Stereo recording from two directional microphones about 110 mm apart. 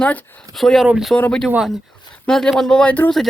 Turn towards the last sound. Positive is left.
turn(degrees=15)  # may be behind; listen again after turning